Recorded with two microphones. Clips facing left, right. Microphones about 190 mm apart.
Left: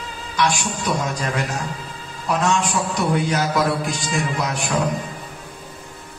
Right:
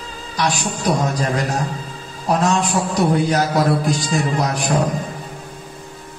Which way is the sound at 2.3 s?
40° right (ahead or behind).